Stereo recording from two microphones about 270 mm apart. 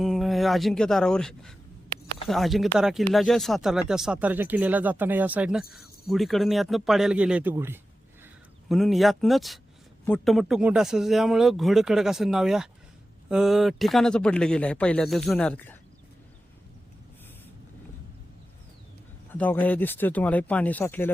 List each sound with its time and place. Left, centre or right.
0.0 s speech: centre
19.3 s speech: centre